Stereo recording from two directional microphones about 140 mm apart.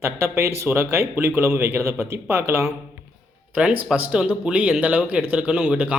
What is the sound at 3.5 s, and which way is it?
Speech, 5° right (ahead or behind).